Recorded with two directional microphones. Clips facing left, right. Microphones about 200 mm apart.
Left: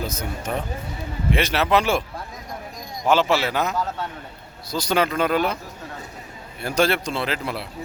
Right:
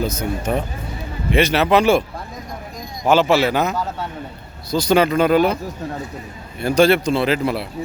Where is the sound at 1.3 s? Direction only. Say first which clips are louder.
Right 5 dB; centre (ahead or behind).